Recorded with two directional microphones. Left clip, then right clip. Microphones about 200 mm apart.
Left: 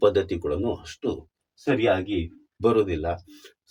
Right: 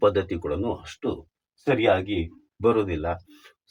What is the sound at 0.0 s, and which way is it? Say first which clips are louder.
Speech: left 1 dB; 25° left (ahead or behind).